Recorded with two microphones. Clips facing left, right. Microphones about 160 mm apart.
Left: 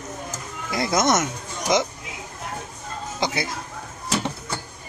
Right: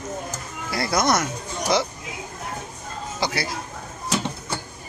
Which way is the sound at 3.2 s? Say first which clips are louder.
Left 1 dB; 20° left (ahead or behind).